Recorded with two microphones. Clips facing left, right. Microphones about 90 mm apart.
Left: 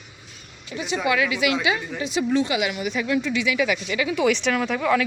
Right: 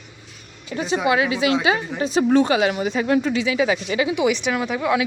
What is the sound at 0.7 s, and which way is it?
Speech, 40° right (ahead or behind).